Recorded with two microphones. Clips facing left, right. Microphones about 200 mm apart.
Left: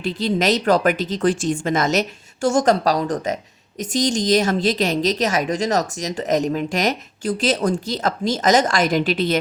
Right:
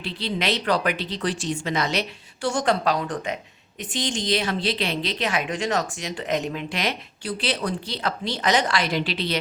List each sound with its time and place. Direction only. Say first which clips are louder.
0.0 s a woman's voice: left 7 dB; 45° left (ahead or behind)